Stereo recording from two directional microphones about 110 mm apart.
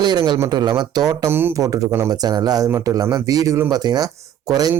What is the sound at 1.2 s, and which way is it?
Speech, 20° right (ahead or behind).